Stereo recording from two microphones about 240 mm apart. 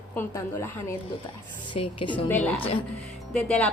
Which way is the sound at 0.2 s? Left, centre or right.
Centre.